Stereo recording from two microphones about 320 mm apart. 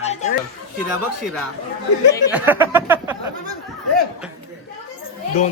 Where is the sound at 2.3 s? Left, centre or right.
Centre.